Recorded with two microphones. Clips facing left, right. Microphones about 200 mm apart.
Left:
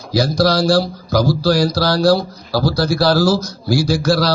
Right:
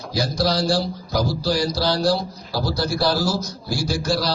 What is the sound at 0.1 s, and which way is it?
A man's voice, 80° left.